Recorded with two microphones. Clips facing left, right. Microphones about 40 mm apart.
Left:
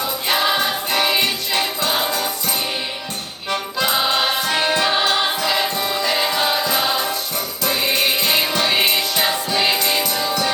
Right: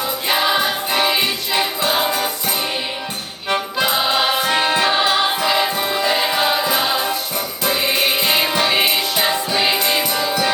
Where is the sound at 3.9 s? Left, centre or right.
Centre.